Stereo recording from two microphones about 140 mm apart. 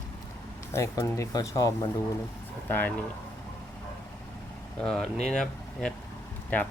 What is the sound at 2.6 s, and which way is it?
Speech, 15° left (ahead or behind).